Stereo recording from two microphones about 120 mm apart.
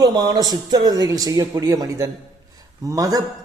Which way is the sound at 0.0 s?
35° right (ahead or behind).